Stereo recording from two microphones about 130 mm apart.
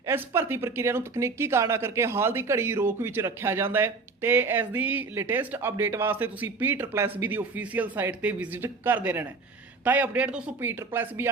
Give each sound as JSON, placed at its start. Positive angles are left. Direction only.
{"t": 0.0, "sound": "speech", "side_deg": -20}